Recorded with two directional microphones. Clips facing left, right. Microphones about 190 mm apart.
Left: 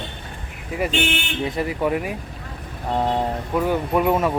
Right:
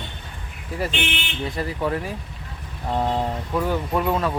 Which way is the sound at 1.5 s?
20° left (ahead or behind).